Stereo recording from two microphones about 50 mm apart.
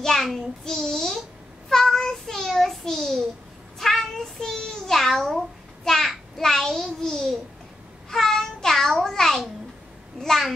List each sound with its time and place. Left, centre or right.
0.0 s a child's voice: centre
1.7 s child singing: centre
5.9 s a child's voice: centre
8.1 s a sound: centre
10.1 s a child's voice: centre